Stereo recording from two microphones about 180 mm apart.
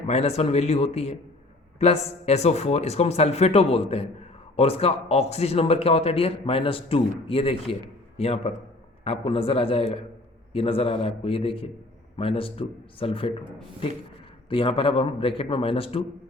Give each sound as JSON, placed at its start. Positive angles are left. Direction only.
{"t": 0.1, "sound": "a man's voice", "side_deg": 35}
{"t": 14.5, "sound": "a man's voice", "side_deg": 30}